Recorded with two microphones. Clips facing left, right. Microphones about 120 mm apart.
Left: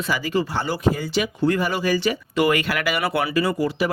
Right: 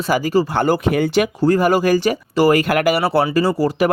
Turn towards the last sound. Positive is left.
turn(degrees=-35)  # may be behind; listen again after turning